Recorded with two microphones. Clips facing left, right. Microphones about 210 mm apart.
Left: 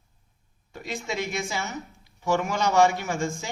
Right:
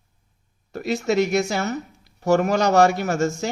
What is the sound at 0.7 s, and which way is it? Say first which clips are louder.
Speech: right 11 dB; 70° right (ahead or behind).